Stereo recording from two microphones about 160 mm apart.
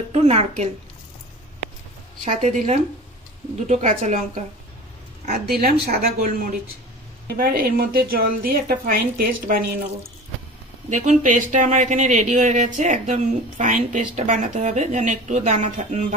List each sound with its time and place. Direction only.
0.1 s a woman's voice: 40° right (ahead or behind)
2.2 s speech: 45° right (ahead or behind)
5.3 s speech: 70° right (ahead or behind)
10.9 s speech: 50° right (ahead or behind)